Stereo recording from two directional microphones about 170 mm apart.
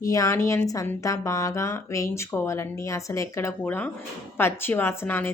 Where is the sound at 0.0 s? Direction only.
20° left (ahead or behind).